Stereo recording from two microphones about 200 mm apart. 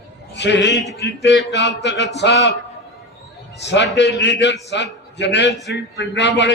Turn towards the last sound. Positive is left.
turn(degrees=60)  # may be behind; listen again after turning